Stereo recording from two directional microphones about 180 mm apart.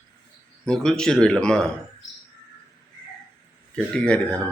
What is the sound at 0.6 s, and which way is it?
A man's voice, 5° left (ahead or behind).